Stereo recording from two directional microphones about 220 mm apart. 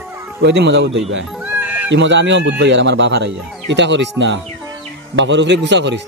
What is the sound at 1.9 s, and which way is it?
Speech, 55° right (ahead or behind).